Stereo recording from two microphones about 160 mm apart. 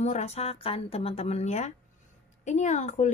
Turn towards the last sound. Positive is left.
turn(degrees=45)  # may be behind; listen again after turning